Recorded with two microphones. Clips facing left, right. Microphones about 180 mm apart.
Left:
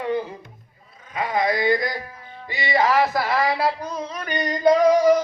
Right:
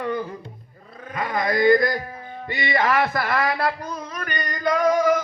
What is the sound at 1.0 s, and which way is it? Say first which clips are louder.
Speech: left 2 dB; 50° right (ahead or behind).